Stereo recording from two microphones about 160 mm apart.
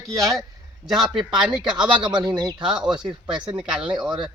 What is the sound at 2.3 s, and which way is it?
Speech, 25° right (ahead or behind).